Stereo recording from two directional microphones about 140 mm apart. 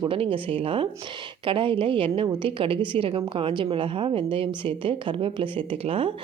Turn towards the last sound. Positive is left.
turn(degrees=-40)  # may be behind; listen again after turning